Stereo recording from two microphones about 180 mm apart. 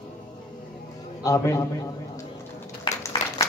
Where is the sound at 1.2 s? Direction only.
20° left (ahead or behind).